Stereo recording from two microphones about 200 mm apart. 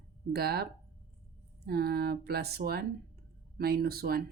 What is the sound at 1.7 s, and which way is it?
Speech, 50° right (ahead or behind).